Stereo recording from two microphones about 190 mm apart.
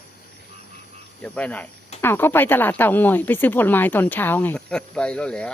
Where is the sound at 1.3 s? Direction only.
5° left (ahead or behind).